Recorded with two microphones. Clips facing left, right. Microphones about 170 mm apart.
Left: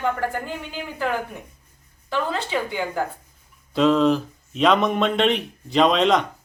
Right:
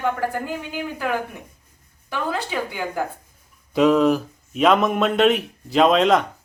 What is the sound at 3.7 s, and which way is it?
Speech, 10° right (ahead or behind).